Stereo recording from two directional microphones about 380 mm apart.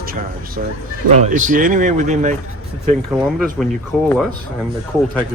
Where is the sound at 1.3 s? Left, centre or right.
Centre.